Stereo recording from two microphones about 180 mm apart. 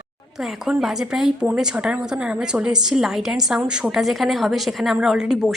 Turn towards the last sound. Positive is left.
turn(degrees=0)  # may be behind; listen again after turning